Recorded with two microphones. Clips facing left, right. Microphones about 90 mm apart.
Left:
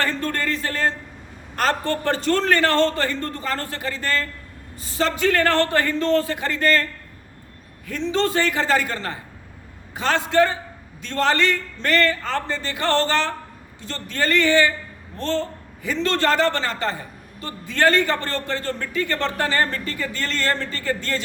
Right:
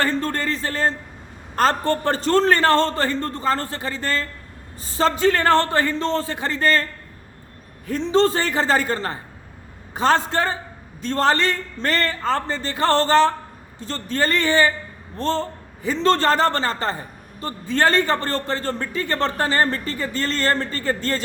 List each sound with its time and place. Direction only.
0.0 s a man's voice: 30° right (ahead or behind)
7.9 s a man's voice: 35° right (ahead or behind)